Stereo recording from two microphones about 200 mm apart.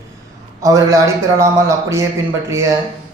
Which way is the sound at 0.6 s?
15° right (ahead or behind).